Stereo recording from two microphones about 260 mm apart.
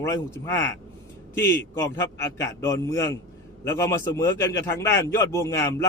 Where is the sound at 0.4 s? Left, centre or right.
Centre.